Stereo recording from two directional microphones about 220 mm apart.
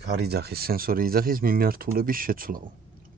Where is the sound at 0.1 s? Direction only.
45° right (ahead or behind).